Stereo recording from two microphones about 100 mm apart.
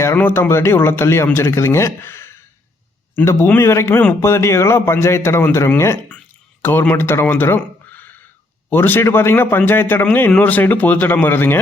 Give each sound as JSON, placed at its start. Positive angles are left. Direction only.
{"t": 0.0, "sound": "a man's voice", "side_deg": 25}